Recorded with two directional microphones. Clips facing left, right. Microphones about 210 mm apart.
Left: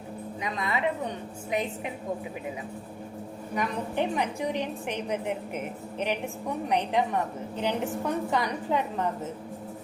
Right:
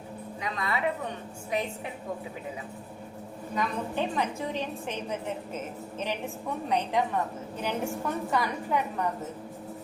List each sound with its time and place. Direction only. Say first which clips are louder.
0.4 s a woman's voice: left 1 dB; 20° left (ahead or behind)
3.5 s a woman's voice: left 1 dB; 15° left (ahead or behind)